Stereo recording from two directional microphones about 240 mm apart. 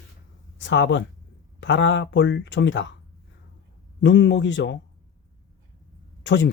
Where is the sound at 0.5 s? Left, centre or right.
Left.